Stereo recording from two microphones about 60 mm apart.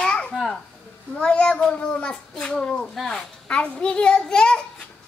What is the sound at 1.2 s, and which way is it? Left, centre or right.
A child's voice, centre.